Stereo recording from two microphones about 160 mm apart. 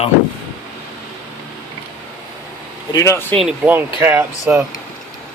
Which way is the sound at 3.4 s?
10° right (ahead or behind).